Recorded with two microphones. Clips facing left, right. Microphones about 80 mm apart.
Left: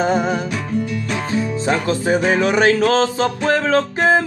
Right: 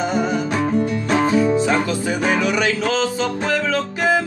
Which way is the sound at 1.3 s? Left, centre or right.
Right.